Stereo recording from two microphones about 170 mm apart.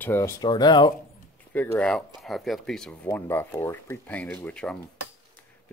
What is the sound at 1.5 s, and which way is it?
Speech, 5° left (ahead or behind).